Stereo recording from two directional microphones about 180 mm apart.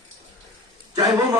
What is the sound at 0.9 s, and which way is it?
Speech, 20° right (ahead or behind).